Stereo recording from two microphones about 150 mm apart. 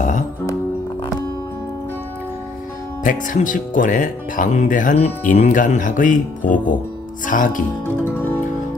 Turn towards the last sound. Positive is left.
turn(degrees=65)  # may be behind; listen again after turning